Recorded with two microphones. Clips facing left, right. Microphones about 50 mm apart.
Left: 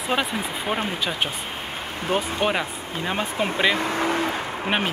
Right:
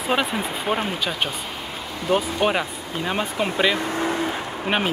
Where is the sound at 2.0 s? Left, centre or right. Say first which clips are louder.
Right 3 dB; left.